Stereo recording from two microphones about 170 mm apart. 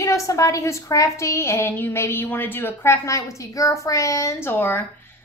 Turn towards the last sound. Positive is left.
turn(degrees=10)  # may be behind; listen again after turning